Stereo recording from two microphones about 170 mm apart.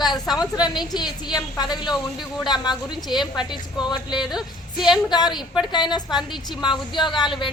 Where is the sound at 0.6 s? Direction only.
25° left (ahead or behind).